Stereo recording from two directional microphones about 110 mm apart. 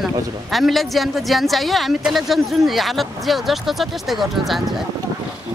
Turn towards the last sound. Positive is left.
turn(degrees=0)  # may be behind; listen again after turning